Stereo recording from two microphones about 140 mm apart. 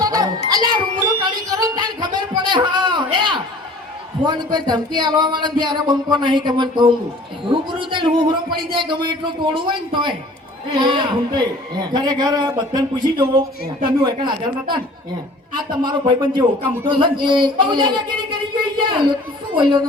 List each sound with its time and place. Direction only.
0.0 s music: 25° right (ahead or behind)
4.3 s a man's voice: 30° right (ahead or behind)